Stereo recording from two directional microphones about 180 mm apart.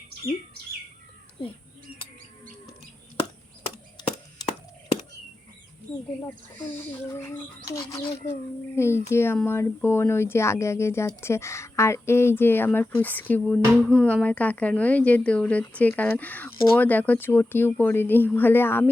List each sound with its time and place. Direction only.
5.9 s speech: 5° left (ahead or behind)
7.7 s speech: 20° left (ahead or behind)
8.7 s speech: 15° left (ahead or behind)